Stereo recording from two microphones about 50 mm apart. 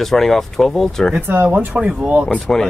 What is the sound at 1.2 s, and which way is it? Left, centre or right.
Speech, right.